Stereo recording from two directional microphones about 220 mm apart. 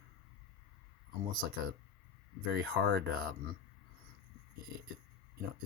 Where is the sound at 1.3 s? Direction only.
40° right (ahead or behind).